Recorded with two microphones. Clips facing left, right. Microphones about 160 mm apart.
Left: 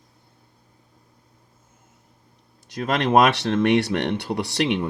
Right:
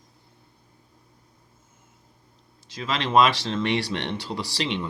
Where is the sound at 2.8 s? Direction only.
60° left (ahead or behind).